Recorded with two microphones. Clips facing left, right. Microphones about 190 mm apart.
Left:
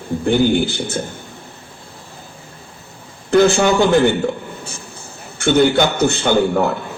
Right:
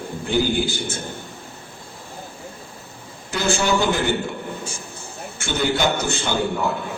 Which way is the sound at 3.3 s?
55° left (ahead or behind).